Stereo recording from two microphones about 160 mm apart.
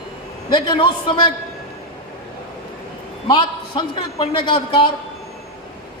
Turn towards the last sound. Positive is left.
turn(degrees=30)  # may be behind; listen again after turning